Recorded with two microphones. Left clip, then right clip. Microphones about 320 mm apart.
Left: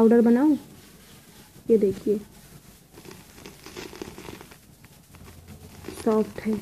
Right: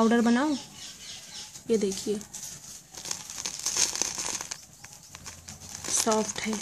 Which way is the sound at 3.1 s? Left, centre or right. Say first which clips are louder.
Right 12 dB; centre.